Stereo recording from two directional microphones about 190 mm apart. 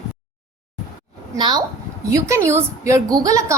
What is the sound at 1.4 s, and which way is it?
A child's voice, 25° right (ahead or behind).